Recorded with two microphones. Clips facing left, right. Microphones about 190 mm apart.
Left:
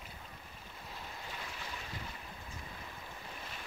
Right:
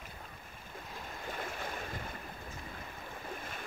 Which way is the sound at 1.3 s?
50° right (ahead or behind).